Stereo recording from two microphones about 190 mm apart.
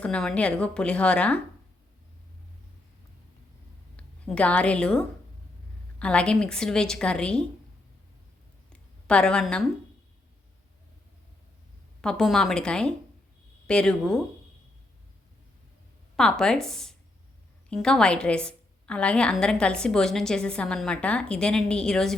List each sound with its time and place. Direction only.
0.0 s a woman's voice: 5° left (ahead or behind)
3.9 s a woman's voice: 5° left (ahead or behind)
9.0 s a woman's voice: 5° left (ahead or behind)
12.0 s a woman's voice: centre (ahead or behind)
16.1 s a woman's voice: 5° left (ahead or behind)